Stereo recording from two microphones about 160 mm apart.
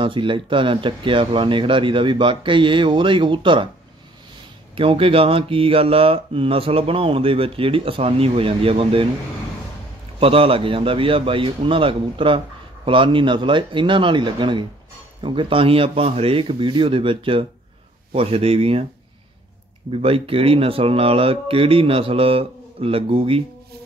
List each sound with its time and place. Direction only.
0.0 s speech: 30° right (ahead or behind)
4.7 s speech: 35° right (ahead or behind)
10.2 s speech: 35° right (ahead or behind)
19.9 s speech: 35° right (ahead or behind)